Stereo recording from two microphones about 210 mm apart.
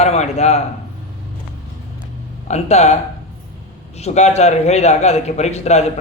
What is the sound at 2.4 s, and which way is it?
Speech, 30° left (ahead or behind).